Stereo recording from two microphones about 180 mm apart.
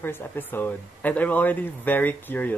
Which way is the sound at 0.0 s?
10° left (ahead or behind).